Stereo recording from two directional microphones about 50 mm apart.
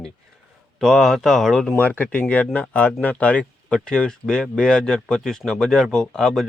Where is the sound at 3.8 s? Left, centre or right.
Centre.